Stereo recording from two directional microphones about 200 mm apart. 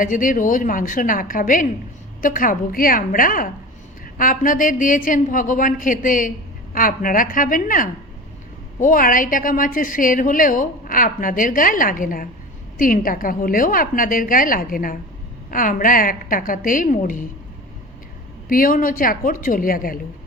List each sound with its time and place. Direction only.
0.0 s a woman's voice: 40° left (ahead or behind)
18.4 s a woman's voice: 45° left (ahead or behind)